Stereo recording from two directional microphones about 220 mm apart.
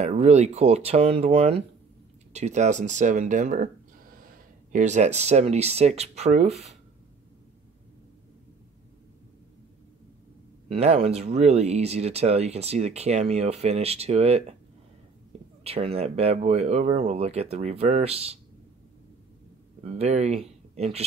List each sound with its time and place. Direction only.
0.0 s speech: 30° right (ahead or behind)
10.7 s speech: 25° right (ahead or behind)
15.6 s speech: 25° right (ahead or behind)
19.8 s speech: 30° right (ahead or behind)